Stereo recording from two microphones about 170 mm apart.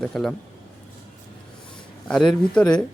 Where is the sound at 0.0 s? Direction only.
5° left (ahead or behind).